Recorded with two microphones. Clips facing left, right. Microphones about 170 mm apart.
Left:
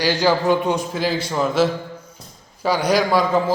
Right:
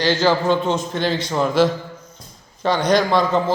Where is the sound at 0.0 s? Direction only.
10° left (ahead or behind).